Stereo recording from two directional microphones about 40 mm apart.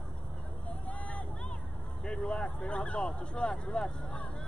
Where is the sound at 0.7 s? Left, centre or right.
Left.